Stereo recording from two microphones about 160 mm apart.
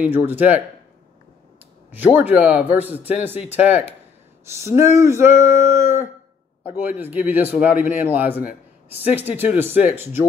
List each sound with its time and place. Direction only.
0.0 s speech: 10° right (ahead or behind)
1.9 s speech: 10° right (ahead or behind)
5.3 s a sound: 45° left (ahead or behind)
5.8 s a man's voice: 15° right (ahead or behind)